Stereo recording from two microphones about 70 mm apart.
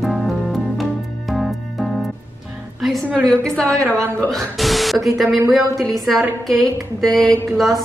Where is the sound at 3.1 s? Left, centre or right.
Centre.